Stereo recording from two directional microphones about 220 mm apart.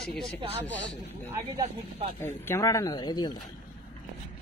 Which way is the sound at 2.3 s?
10° left (ahead or behind).